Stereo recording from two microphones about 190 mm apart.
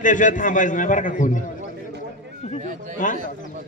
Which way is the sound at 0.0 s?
40° left (ahead or behind).